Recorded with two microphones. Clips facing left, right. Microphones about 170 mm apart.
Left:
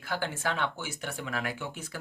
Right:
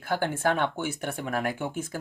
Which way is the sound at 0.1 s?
50° right (ahead or behind).